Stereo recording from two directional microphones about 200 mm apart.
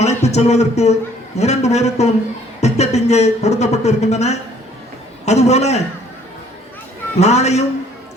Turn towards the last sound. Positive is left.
turn(degrees=35)  # may be behind; listen again after turning